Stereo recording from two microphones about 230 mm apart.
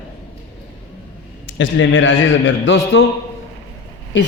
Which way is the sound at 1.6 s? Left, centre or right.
Left.